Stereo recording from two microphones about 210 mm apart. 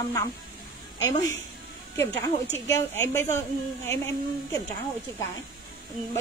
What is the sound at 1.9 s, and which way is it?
A woman's voice, 10° left (ahead or behind).